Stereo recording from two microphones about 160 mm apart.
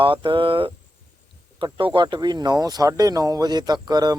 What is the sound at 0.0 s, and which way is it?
Speech, 30° right (ahead or behind).